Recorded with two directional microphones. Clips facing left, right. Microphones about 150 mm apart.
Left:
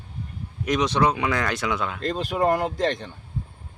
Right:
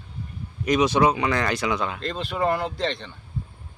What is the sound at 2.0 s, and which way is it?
Speech, 45° left (ahead or behind).